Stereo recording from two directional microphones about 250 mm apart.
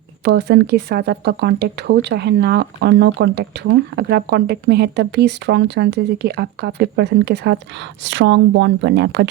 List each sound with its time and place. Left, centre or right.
0.3 s a woman's voice: right